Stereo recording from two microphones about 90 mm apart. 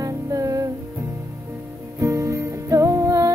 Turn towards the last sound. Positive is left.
turn(degrees=-35)  # may be behind; listen again after turning